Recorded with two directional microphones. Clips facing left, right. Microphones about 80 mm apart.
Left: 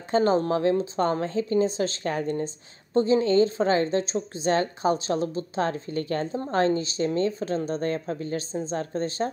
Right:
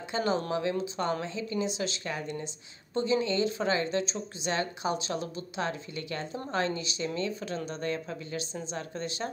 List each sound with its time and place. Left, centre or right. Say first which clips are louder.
0.1 s speech: left 8 dB; left